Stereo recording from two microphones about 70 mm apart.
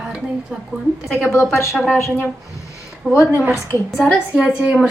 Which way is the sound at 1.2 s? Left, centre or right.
Left.